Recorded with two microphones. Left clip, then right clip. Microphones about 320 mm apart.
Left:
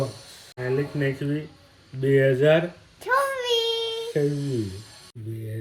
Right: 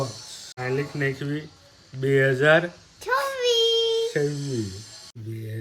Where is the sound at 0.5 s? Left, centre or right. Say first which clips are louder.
Left 1 dB; centre.